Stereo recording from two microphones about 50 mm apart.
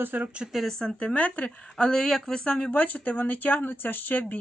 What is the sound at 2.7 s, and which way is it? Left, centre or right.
Speech, left.